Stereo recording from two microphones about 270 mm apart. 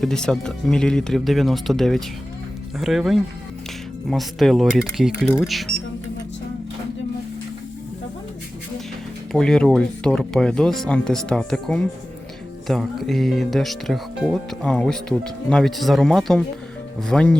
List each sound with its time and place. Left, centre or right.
0.0 s speech: centre
9.3 s speech: centre